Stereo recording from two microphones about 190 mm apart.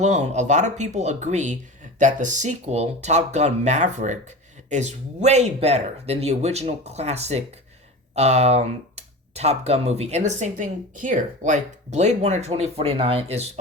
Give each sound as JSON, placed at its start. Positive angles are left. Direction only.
{"t": 0.0, "sound": "speech", "side_deg": -40}